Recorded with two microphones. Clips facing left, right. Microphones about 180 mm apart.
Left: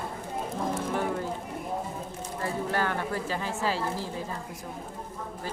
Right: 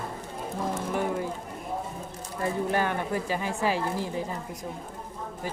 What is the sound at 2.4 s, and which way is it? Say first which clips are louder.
Speech: right 3 dB; 15° right (ahead or behind).